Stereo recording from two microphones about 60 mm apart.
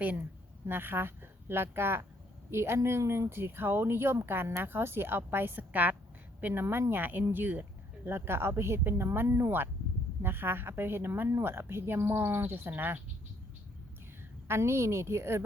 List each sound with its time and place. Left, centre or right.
0.7 s speech: right
14.4 s speech: right